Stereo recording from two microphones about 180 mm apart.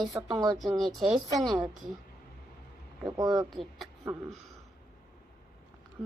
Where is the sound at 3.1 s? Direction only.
20° right (ahead or behind).